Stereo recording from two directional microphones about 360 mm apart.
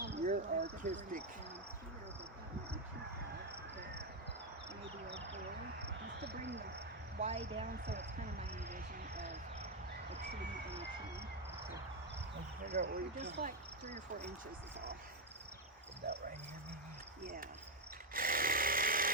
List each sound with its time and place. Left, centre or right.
0.2 s a sound: right
6.2 s speech: right
7.2 s speech: centre
12.8 s speech: right
18.1 s chainsaw: right